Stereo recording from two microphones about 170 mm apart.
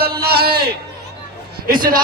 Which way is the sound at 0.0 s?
65° right (ahead or behind).